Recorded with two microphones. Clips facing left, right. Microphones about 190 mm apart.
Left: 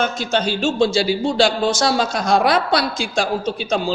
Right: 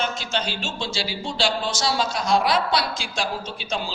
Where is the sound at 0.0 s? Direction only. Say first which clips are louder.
Left 7 dB; 50° left (ahead or behind).